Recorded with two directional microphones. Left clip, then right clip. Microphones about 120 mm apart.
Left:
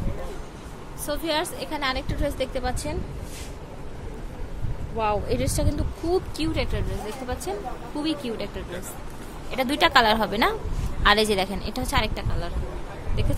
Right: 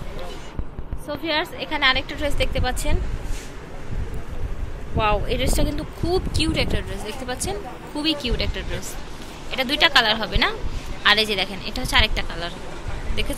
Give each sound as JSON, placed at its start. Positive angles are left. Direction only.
{"t": 1.0, "sound": "speech", "side_deg": 15}
{"t": 2.7, "sound": "speech", "side_deg": 15}
{"t": 4.9, "sound": "speech", "side_deg": 10}
{"t": 9.5, "sound": "a woman's voice", "side_deg": 40}
{"t": 12.0, "sound": "speech", "side_deg": 10}